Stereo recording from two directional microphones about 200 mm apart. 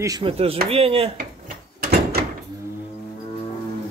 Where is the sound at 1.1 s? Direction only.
45° right (ahead or behind).